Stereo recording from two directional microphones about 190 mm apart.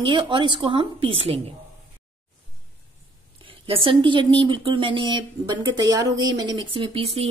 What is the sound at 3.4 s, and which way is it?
Speech, 30° right (ahead or behind).